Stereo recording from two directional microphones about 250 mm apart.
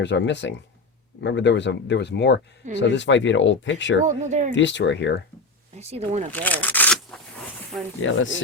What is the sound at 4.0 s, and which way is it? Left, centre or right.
Speech, right.